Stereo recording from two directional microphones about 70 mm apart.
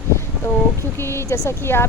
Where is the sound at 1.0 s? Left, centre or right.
Left.